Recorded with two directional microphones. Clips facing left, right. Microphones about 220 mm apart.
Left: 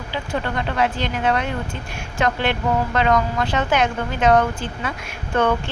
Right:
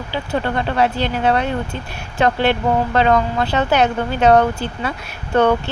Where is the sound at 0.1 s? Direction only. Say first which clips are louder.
Right 4 dB; 30° right (ahead or behind).